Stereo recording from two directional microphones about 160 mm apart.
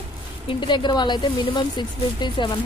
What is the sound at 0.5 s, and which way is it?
Speech, 30° left (ahead or behind).